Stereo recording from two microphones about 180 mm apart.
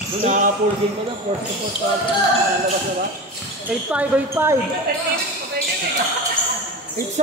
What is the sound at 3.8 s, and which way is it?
Speech, 10° right (ahead or behind).